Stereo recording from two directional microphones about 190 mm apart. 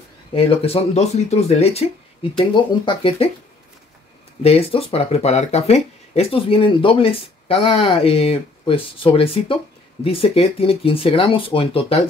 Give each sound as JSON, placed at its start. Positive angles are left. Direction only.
{"t": 0.3, "sound": "speech", "side_deg": 30}
{"t": 4.4, "sound": "speech", "side_deg": 30}